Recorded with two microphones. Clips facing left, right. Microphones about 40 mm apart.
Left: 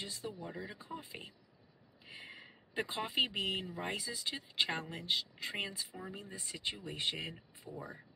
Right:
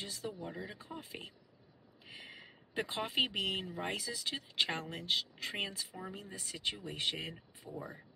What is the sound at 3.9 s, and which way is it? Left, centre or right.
Speech, left.